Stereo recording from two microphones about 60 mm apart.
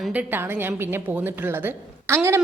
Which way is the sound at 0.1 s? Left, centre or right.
Right.